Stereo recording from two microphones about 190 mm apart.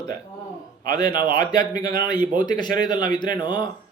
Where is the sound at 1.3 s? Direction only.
20° left (ahead or behind).